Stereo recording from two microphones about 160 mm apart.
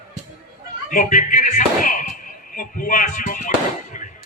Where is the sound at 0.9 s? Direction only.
55° left (ahead or behind).